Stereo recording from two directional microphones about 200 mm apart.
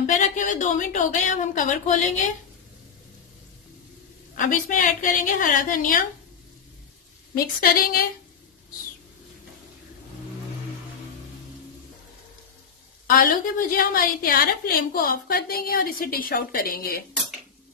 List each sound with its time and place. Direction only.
0.0 s a woman's voice: 40° left (ahead or behind)
4.4 s a woman's voice: 40° left (ahead or behind)
7.3 s a woman's voice: 50° left (ahead or behind)
13.0 s a woman's voice: 45° left (ahead or behind)